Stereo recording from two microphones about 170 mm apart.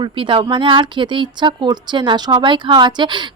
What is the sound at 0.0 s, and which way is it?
Speech, 30° right (ahead or behind).